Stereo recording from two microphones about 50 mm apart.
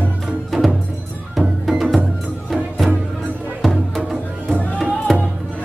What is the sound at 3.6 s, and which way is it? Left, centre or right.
Music, centre.